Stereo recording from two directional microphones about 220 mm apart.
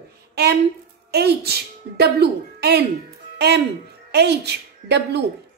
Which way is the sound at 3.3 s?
50° right (ahead or behind).